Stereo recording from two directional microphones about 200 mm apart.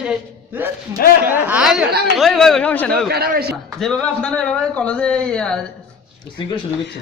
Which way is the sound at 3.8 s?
5° left (ahead or behind).